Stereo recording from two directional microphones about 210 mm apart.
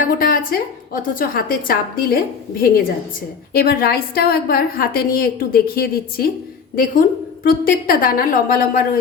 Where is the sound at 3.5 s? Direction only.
45° left (ahead or behind).